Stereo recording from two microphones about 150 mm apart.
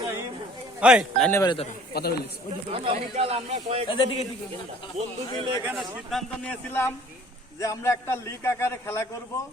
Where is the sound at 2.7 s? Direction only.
40° right (ahead or behind).